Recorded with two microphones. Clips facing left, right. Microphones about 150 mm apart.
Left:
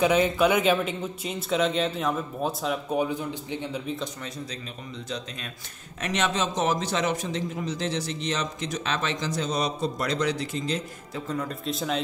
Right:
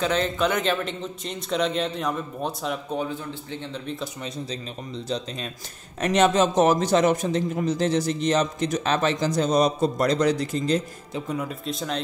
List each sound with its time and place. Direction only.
0.0 s a man's voice: 10° left (ahead or behind)
3.0 s speech: 15° left (ahead or behind)
4.2 s a man's voice: 30° right (ahead or behind)
11.1 s a man's voice: 10° right (ahead or behind)